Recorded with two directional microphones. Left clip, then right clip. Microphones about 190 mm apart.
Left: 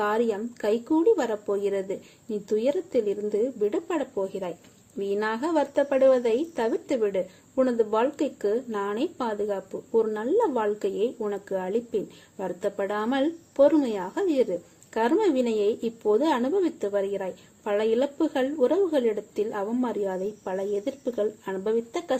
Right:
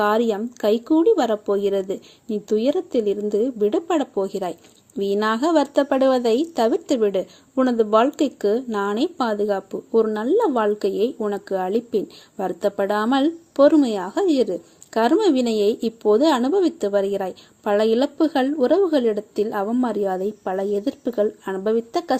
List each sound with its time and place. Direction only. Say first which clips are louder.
0.0 s a woman's voice: right 6 dB; 35° right (ahead or behind)